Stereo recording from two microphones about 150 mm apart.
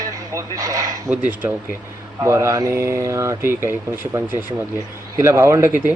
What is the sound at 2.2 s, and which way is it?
Speech, 20° right (ahead or behind).